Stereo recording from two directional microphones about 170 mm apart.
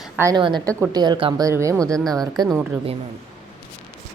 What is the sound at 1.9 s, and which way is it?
Speech, 5° left (ahead or behind).